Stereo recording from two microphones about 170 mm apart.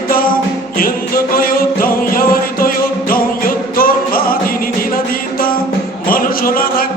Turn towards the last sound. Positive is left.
turn(degrees=60)  # may be behind; listen again after turning